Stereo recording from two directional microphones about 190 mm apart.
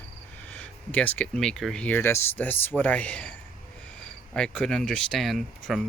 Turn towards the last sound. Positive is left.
turn(degrees=0)  # may be behind; listen again after turning